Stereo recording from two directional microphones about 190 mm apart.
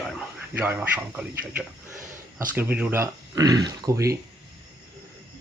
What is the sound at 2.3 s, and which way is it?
Speech, 10° right (ahead or behind).